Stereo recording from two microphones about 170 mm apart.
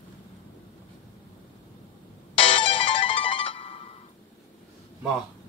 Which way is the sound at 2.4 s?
35° left (ahead or behind).